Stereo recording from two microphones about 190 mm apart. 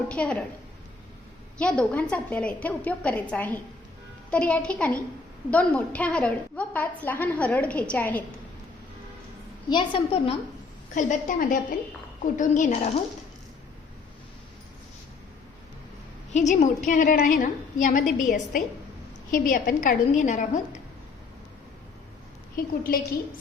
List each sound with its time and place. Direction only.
0.1 s a woman's voice: 5° left (ahead or behind)
1.5 s a woman's voice: 5° left (ahead or behind)
9.6 s a woman's voice: 25° left (ahead or behind)
10.9 s a woman's voice: 40° left (ahead or behind)
16.3 s a woman's voice: 40° left (ahead or behind)
22.5 s a woman's voice: 50° left (ahead or behind)